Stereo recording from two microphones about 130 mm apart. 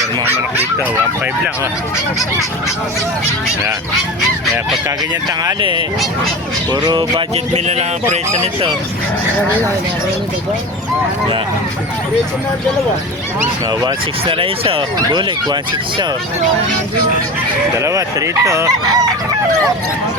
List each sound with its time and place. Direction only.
5.4 s music: 35° right (ahead or behind)
7.5 s speech: 60° right (ahead or behind)
13.8 s speech: 45° right (ahead or behind)
14.9 s music: 35° right (ahead or behind)
17.7 s speech: 25° right (ahead or behind)